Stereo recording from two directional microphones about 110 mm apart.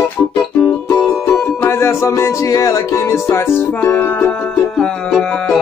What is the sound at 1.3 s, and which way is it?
Music, 15° left (ahead or behind).